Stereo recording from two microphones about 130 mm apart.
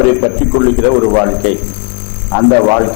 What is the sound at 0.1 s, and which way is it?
A man's voice, 20° left (ahead or behind).